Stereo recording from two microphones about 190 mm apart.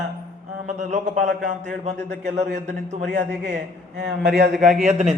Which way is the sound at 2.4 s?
65° right (ahead or behind).